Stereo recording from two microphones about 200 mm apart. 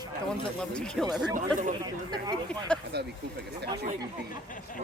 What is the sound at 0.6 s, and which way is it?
Speech, 5° left (ahead or behind).